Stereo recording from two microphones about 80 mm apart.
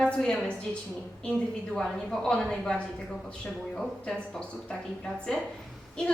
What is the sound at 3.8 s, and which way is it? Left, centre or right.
A woman's voice, centre.